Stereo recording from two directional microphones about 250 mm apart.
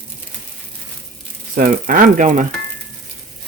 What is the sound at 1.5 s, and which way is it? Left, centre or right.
Speech, right.